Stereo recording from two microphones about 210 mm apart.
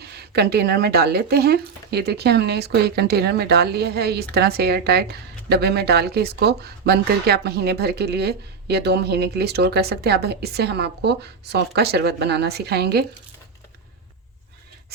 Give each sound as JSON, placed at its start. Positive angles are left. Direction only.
{"t": 0.0, "sound": "speech", "side_deg": -50}